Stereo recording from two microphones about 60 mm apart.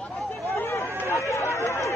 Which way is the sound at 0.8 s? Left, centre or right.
Right.